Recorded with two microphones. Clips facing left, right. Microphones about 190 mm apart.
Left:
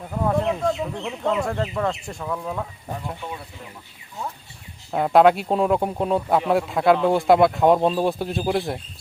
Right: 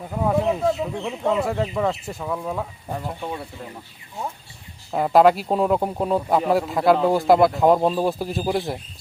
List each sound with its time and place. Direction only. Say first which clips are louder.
0.1 s speech: right 1 dB; 5° right (ahead or behind)
4.9 s speech: even; centre (ahead or behind)